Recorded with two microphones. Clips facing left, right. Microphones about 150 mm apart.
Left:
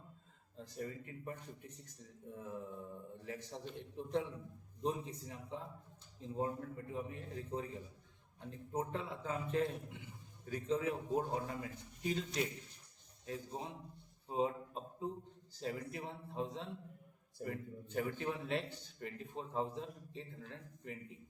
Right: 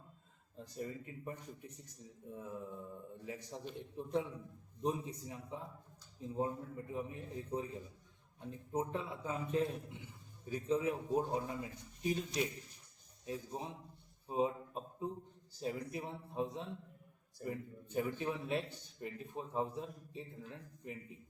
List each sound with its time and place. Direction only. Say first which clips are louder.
0.5 s a man's voice: right 1 dB; 20° right (ahead or behind)
14.3 s a sound: right 1 dB; 15° right (ahead or behind)
15.6 s a man's voice: right 2 dB; 20° right (ahead or behind)